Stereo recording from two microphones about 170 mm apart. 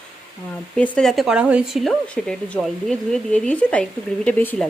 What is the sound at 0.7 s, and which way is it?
Speech, 5° left (ahead or behind).